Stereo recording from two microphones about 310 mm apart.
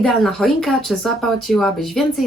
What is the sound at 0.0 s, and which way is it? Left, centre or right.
Speech, centre.